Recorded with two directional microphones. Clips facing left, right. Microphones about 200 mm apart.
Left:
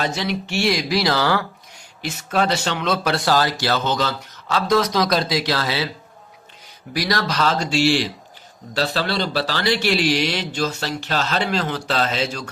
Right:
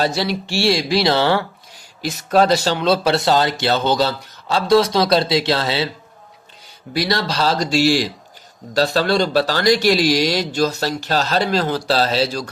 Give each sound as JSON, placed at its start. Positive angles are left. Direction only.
{"t": 0.0, "sound": "speech", "side_deg": -35}
{"t": 6.9, "sound": "a man's voice", "side_deg": -25}